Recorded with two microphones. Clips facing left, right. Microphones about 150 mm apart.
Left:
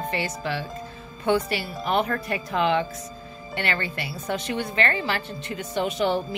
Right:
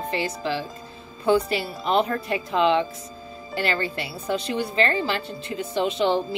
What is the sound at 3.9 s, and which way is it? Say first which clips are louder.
Speech: right 2 dB; 30° right (ahead or behind).